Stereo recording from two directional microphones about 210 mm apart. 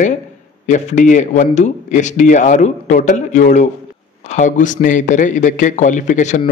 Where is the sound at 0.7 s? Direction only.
35° left (ahead or behind).